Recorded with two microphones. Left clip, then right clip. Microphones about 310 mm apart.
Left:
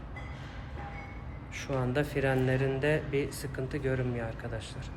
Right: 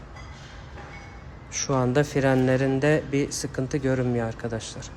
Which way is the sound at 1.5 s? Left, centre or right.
Centre.